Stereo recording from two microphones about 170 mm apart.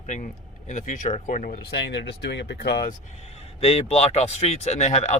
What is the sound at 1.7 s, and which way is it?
Speech, 85° left.